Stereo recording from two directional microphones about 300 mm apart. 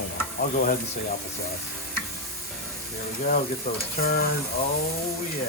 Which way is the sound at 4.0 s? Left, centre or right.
Left.